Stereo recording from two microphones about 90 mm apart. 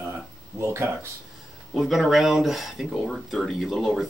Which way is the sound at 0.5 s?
30° right (ahead or behind).